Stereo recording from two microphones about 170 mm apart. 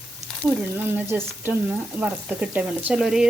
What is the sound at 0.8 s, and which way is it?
Speech, 10° right (ahead or behind).